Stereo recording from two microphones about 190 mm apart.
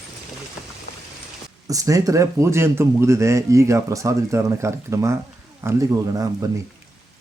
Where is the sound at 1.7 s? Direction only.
15° right (ahead or behind).